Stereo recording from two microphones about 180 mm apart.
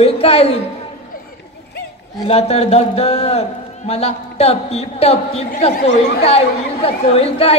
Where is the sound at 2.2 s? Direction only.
35° left (ahead or behind).